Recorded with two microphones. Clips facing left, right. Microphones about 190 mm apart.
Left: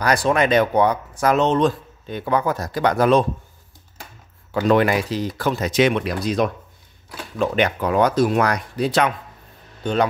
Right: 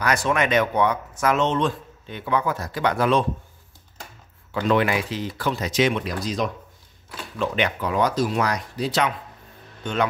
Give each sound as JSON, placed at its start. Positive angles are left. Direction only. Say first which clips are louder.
{"t": 0.0, "sound": "speech", "louder": "left 4 dB", "side_deg": 35}
{"t": 4.5, "sound": "speech", "louder": "left 4 dB", "side_deg": 40}
{"t": 7.3, "sound": "speech", "louder": "left 4 dB", "side_deg": 45}
{"t": 9.8, "sound": "speech", "louder": "left 6 dB", "side_deg": 35}